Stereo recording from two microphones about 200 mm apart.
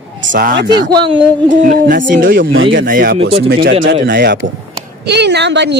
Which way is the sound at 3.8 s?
65° right (ahead or behind).